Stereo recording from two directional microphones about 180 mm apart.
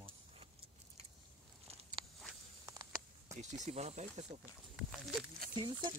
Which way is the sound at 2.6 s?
20° right (ahead or behind).